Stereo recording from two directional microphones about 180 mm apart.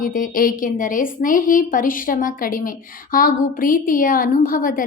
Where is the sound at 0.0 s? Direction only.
50° left (ahead or behind).